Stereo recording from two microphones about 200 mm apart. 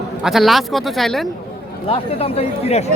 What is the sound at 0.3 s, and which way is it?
Speech, centre (ahead or behind).